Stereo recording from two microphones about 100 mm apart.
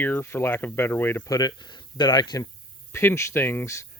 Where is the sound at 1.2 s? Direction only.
40° left (ahead or behind).